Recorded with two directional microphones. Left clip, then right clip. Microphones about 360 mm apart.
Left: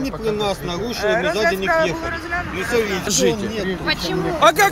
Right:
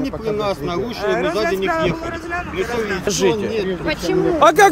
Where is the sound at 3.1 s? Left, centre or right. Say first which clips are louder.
Right 1 dB; centre.